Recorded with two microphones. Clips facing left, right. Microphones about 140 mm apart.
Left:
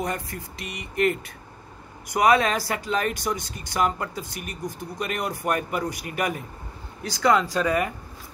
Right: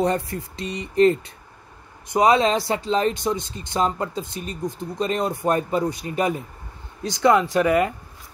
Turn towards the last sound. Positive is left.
turn(degrees=-20)  # may be behind; listen again after turning